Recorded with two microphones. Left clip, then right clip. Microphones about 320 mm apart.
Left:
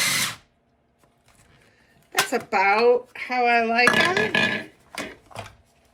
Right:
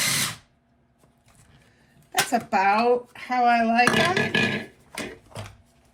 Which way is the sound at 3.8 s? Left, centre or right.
Centre.